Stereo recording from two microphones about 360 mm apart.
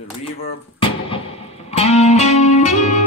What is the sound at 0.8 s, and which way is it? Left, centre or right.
Music, centre.